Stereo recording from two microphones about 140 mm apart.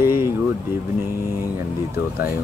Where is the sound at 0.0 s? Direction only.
15° right (ahead or behind).